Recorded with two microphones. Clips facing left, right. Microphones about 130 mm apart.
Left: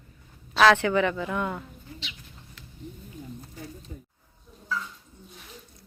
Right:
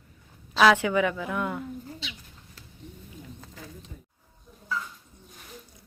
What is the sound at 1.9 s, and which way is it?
Bird, 35° right (ahead or behind).